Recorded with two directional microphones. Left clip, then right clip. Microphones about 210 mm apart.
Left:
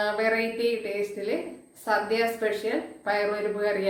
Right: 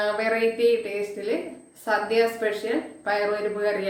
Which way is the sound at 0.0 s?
5° right (ahead or behind).